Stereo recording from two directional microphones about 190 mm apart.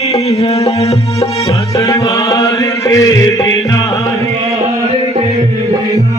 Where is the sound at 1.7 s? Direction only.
15° left (ahead or behind).